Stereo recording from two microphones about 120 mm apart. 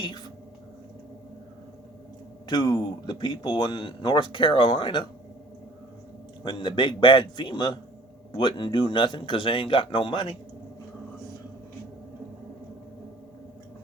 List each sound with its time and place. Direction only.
2.5 s speech: 35° left (ahead or behind)
6.4 s speech: 40° left (ahead or behind)